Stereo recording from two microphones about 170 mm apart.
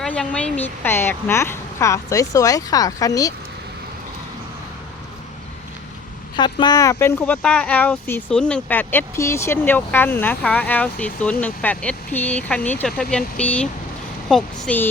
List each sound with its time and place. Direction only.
0.0 s speech: 5° left (ahead or behind)
6.3 s speech: 25° left (ahead or behind); by 14.8 s 5° left (ahead or behind)